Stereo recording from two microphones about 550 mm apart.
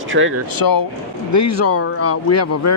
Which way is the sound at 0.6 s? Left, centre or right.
Left.